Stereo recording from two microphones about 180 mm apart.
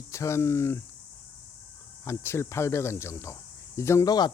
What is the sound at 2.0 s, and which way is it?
Speech, 15° left (ahead or behind).